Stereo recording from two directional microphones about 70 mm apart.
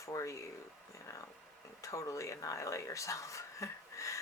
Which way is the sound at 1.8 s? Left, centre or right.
Left.